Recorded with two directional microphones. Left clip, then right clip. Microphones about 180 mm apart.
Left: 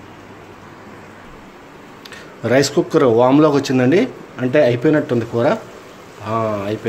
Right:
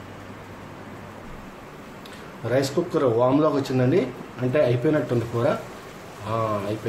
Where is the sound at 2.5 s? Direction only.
40° left (ahead or behind).